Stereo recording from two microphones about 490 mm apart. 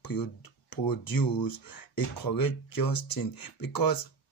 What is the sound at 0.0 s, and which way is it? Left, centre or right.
Speech, left.